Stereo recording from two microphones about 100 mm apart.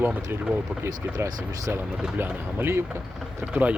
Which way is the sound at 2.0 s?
20° right (ahead or behind).